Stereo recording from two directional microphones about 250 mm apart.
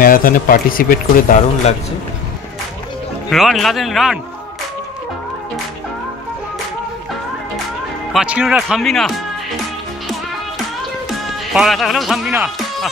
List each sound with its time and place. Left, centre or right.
0.0 s speech: left
3.3 s speech: centre
8.1 s speech: centre
11.5 s speech: centre